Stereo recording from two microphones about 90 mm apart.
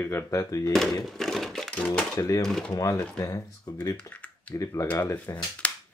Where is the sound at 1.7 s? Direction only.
15° left (ahead or behind).